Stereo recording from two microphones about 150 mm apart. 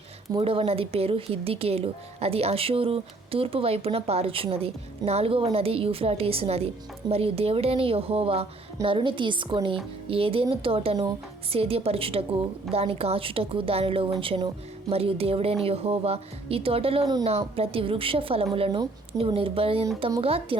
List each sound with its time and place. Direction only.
0.3 s speech: 40° right (ahead or behind)
20.0 s a woman's voice: 25° right (ahead or behind)
20.2 s speech: 40° right (ahead or behind)